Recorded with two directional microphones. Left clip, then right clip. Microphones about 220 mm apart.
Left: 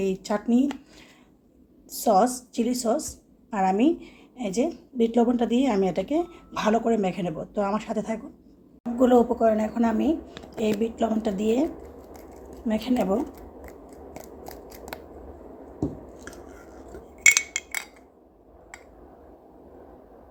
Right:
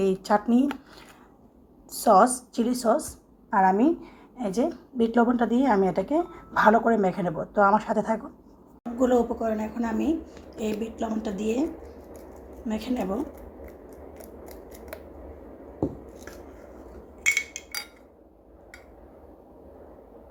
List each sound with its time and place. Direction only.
0.0 s a woman's voice: centre (ahead or behind)
1.9 s a woman's voice: centre (ahead or behind)
9.0 s a woman's voice: 20° left (ahead or behind)
12.6 s a woman's voice: 20° left (ahead or behind)